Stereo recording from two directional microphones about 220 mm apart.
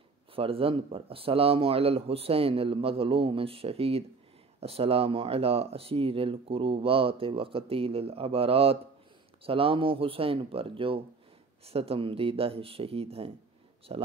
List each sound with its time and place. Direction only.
0.3 s speech: 25° right (ahead or behind)